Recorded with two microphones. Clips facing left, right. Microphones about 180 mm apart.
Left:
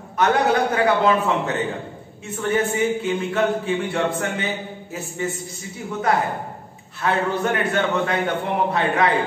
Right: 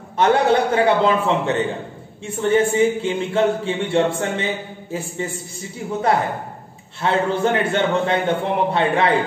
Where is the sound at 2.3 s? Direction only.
30° right (ahead or behind).